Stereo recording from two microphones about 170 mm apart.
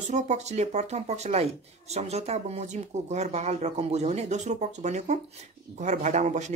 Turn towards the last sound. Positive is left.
turn(degrees=-45)  # may be behind; listen again after turning